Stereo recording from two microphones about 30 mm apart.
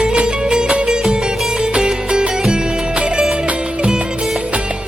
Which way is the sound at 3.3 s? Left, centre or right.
Right.